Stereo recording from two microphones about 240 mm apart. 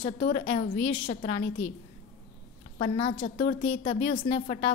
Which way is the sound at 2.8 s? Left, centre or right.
Left.